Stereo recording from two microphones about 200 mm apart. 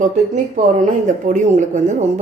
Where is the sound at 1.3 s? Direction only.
40° right (ahead or behind).